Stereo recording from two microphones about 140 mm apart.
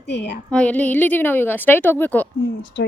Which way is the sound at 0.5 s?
10° left (ahead or behind).